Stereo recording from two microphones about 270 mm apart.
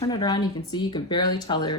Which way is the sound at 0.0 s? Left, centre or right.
Centre.